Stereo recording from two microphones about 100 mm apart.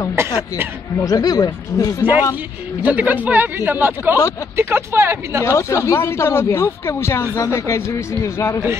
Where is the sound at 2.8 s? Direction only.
15° right (ahead or behind).